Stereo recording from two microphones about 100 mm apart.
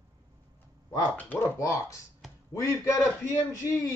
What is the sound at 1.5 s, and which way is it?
A man's voice, 30° left (ahead or behind).